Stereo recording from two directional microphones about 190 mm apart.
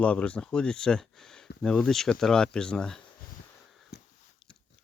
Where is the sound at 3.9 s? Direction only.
60° left (ahead or behind).